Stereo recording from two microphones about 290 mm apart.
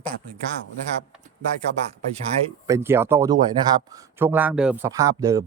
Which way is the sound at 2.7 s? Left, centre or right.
Centre.